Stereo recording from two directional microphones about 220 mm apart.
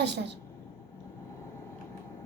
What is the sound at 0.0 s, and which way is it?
Speech, 50° right (ahead or behind).